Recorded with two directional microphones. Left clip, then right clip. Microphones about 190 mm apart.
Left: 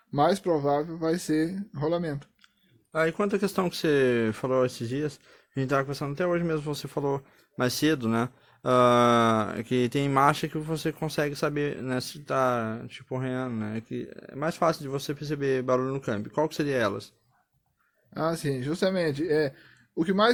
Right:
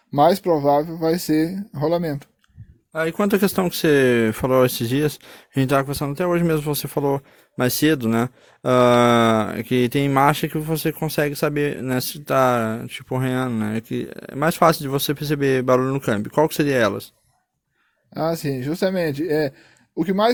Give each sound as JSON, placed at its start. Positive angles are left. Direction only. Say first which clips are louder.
{"t": 0.1, "sound": "speech", "louder": "right 8 dB", "side_deg": -40}
{"t": 3.5, "sound": "speech", "louder": "right 7 dB", "side_deg": -30}
{"t": 18.1, "sound": "speech", "louder": "right 5 dB", "side_deg": -35}